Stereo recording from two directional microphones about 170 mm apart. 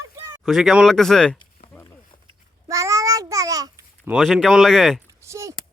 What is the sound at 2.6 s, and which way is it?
Babbling, 20° right (ahead or behind).